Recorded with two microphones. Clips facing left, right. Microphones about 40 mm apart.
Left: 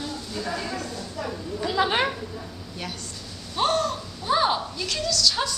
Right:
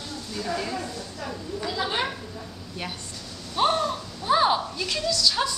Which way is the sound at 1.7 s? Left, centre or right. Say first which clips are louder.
Left 5 dB; left.